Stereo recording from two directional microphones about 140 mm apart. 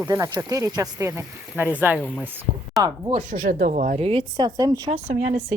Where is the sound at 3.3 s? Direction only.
85° right; by 4.0 s 65° right (ahead or behind).